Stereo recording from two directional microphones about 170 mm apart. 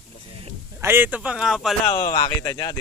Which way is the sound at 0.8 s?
15° right (ahead or behind).